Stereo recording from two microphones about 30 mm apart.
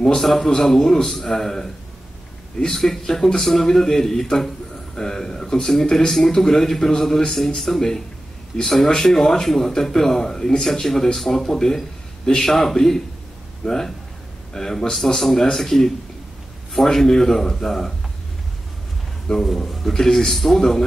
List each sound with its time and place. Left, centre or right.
0.0 s speech: centre
2.7 s speech: centre
8.8 s speech: centre
10.6 s speech: centre
19.4 s speech: centre
19.9 s speech: centre